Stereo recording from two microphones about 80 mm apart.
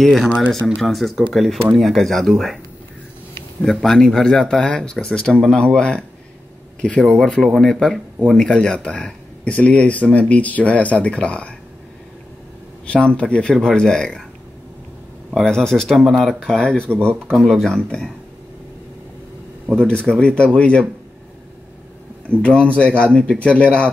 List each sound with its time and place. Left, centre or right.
0.0 s speech: centre
3.8 s speech: centre
12.8 s speech: centre
15.3 s speech: centre
19.7 s speech: centre
22.4 s speech: centre